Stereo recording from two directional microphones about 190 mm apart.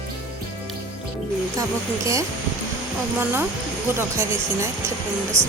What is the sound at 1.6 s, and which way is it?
Speech, 15° right (ahead or behind).